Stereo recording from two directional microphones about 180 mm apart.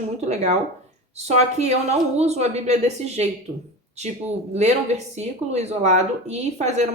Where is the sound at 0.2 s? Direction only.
40° right (ahead or behind).